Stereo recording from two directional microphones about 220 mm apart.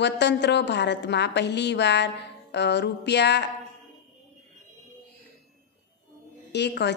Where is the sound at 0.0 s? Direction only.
50° left (ahead or behind).